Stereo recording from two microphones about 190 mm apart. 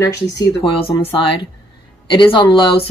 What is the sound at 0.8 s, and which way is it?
Speech, 30° left (ahead or behind).